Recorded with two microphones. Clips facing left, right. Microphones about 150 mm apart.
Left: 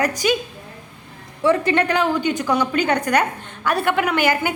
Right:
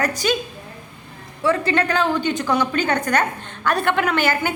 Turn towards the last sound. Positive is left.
turn(degrees=15)  # may be behind; listen again after turning